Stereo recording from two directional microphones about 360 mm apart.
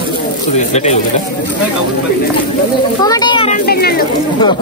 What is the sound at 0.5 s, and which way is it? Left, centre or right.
Speech, centre.